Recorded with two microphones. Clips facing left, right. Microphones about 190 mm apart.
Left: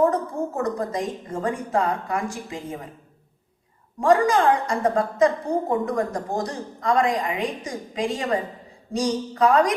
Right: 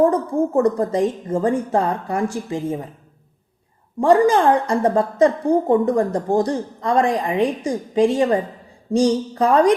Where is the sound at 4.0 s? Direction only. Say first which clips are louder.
Right 4 dB; 30° right (ahead or behind).